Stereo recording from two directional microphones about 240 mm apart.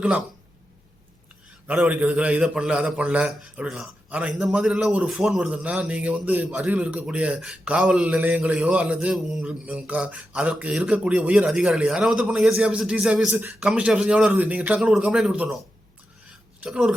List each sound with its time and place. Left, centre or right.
0.0 s a man's voice: centre
1.6 s a man's voice: centre